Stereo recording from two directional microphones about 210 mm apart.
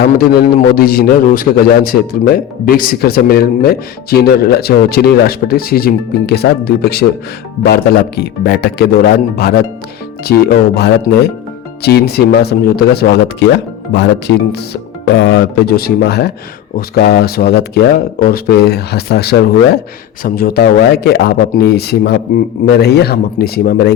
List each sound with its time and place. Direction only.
0.2 s a man's voice: 45° left (ahead or behind)
10.8 s a man's voice: 50° left (ahead or behind)